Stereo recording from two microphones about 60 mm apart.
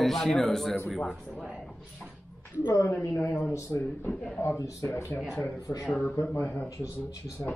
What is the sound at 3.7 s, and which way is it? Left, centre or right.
Speech, left.